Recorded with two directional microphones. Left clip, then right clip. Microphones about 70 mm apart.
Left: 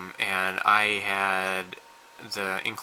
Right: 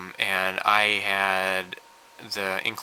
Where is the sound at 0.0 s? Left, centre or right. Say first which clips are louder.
Right 2 dB; right.